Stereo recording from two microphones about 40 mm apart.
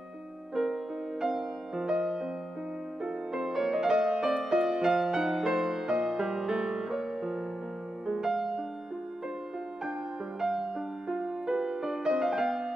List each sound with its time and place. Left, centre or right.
1.8 s music: centre
10.4 s music: centre
11.4 s music: centre